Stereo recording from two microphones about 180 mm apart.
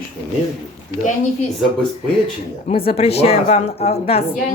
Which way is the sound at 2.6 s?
35° left (ahead or behind).